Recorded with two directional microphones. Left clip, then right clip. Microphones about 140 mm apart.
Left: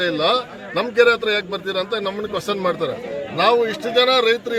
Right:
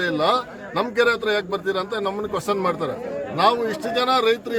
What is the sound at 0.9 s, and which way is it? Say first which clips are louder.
A man's voice: left 5 dB; 50° right (ahead or behind).